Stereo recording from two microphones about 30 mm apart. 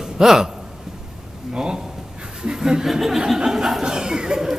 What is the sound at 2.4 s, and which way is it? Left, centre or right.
Chuckle, right.